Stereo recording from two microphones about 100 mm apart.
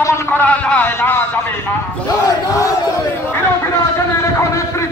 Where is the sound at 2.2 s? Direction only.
35° left (ahead or behind).